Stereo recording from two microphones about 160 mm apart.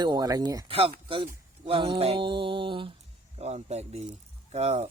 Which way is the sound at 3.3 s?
40° right (ahead or behind).